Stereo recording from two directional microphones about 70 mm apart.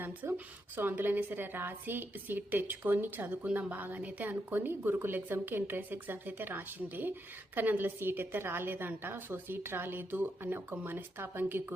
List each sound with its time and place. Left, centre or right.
0.0 s a woman's voice: right